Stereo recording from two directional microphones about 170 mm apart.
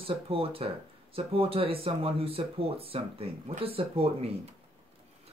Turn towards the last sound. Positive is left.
turn(degrees=-35)  # may be behind; listen again after turning